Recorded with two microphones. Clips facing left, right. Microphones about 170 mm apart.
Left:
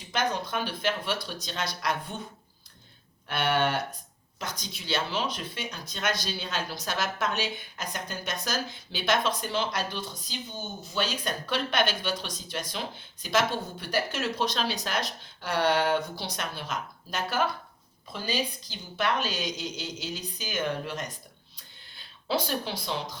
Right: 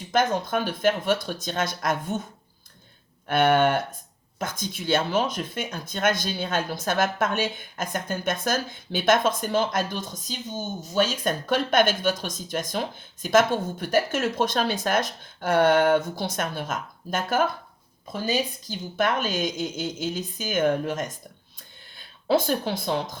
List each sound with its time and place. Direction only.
0.1 s speech: 50° right (ahead or behind)
3.2 s speech: 50° right (ahead or behind)
22.3 s speech: 50° right (ahead or behind)